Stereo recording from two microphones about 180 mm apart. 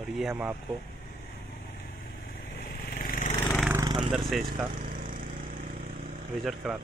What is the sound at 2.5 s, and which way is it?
Vehicle, 60° left (ahead or behind).